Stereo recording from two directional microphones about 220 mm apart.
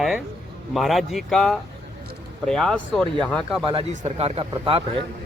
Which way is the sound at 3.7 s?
25° right (ahead or behind).